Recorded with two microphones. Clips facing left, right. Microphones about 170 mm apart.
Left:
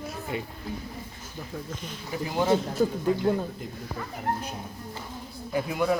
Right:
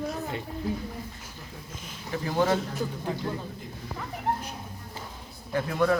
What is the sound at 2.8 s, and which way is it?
Speech, 45° left (ahead or behind).